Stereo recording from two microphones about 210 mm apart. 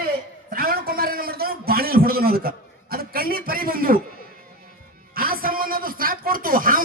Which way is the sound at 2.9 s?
45° right (ahead or behind).